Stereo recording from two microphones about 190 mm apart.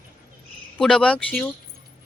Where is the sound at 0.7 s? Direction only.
5° left (ahead or behind).